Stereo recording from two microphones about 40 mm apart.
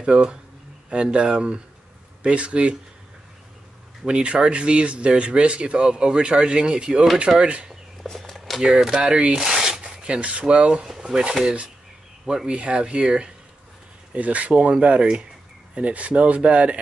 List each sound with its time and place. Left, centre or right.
0.0 s speech: right
4.0 s speech: right
8.2 s a sound: centre
8.5 s speech: centre
8.9 s a sound: right
10.0 s speech: right
12.4 s speech: right
14.1 s speech: right